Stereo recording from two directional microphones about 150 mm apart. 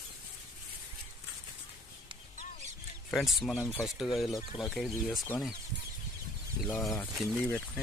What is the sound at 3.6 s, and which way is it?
Speech, 20° left (ahead or behind).